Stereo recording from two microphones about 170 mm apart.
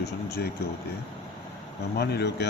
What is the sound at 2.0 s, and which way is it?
Speech, 75° left (ahead or behind).